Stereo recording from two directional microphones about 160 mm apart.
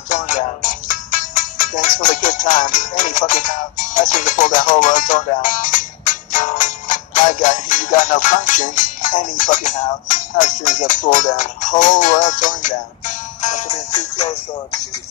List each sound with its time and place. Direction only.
0.1 s music: 50° left (ahead or behind)
10.0 s speech: 55° left (ahead or behind)